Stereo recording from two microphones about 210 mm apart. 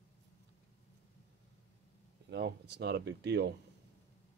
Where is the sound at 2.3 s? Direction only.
55° right (ahead or behind).